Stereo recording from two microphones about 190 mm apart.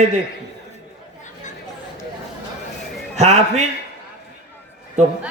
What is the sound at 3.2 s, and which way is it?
Mantra, 35° right (ahead or behind).